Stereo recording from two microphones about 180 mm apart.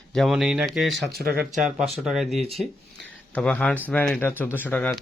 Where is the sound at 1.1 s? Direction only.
55° right (ahead or behind).